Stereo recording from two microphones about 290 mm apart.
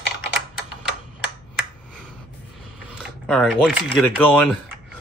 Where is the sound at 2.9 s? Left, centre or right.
Centre.